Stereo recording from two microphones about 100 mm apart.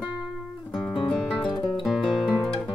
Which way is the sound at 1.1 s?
5° left (ahead or behind).